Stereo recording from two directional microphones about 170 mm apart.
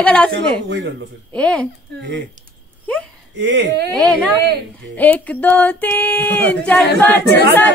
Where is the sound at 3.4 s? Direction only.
90° right.